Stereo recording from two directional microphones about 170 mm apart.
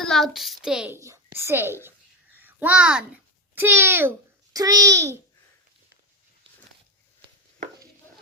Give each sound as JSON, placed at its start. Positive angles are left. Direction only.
{"t": 0.0, "sound": "a child's voice", "side_deg": 0}
{"t": 0.9, "sound": "speech", "side_deg": -15}
{"t": 2.3, "sound": "a sound", "side_deg": -10}
{"t": 3.5, "sound": "a child's voice", "side_deg": -10}